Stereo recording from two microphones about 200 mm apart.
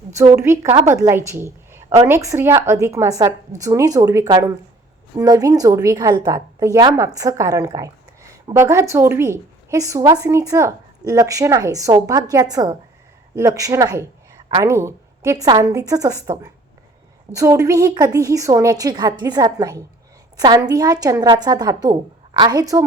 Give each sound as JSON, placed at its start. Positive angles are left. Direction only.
{"t": 0.2, "sound": "a woman's voice", "side_deg": -15}